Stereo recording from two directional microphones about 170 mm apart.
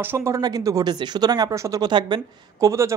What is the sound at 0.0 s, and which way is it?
Speech, 15° right (ahead or behind).